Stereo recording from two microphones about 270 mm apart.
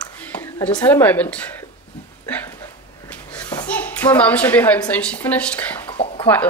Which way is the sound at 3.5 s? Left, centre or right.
Centre.